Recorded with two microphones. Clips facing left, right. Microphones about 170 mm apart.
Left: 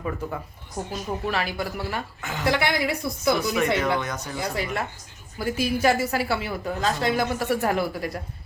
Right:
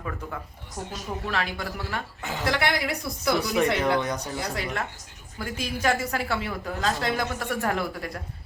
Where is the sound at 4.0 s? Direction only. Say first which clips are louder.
Right 2 dB; 35° right (ahead or behind).